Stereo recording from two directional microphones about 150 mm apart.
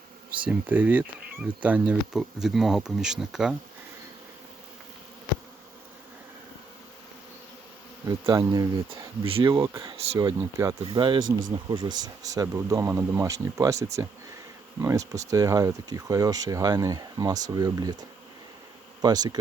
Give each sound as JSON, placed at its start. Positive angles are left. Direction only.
{"t": 0.4, "sound": "speech", "side_deg": -10}
{"t": 8.3, "sound": "speech", "side_deg": -20}
{"t": 10.8, "sound": "speech", "side_deg": -35}
{"t": 19.0, "sound": "speech", "side_deg": -25}